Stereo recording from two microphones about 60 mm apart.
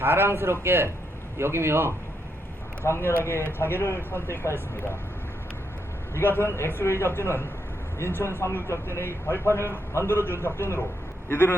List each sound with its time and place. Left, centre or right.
0.0 s a man's voice: right
2.8 s a man's voice: left
6.1 s a man's voice: left